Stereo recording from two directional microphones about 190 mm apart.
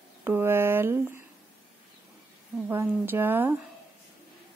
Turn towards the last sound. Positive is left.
turn(degrees=-10)  # may be behind; listen again after turning